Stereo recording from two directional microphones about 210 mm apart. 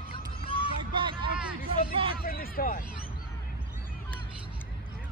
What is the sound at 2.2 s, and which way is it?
Speech, 45° left (ahead or behind).